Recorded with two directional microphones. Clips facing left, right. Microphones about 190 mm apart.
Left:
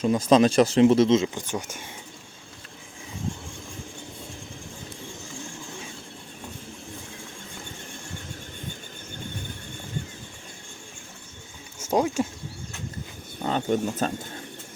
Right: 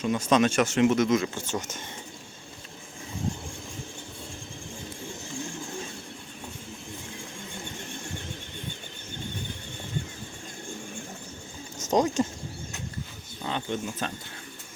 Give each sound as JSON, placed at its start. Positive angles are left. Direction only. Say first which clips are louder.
{"t": 0.0, "sound": "speech", "louder": "left 4 dB", "side_deg": 35}
{"t": 11.8, "sound": "speech", "louder": "even", "side_deg": 10}
{"t": 13.4, "sound": "speech", "louder": "left 6 dB", "side_deg": 45}